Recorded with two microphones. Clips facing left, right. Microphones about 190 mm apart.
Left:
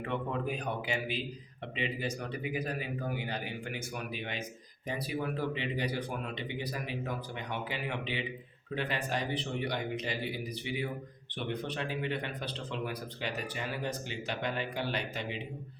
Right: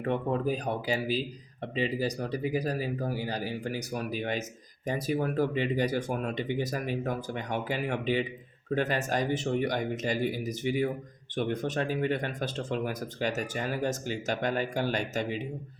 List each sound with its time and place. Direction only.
0.0 s speech: 40° right (ahead or behind)